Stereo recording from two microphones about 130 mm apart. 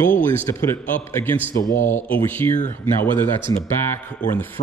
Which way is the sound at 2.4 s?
20° left (ahead or behind).